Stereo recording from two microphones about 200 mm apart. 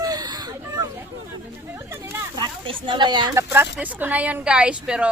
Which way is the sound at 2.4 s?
25° right (ahead or behind).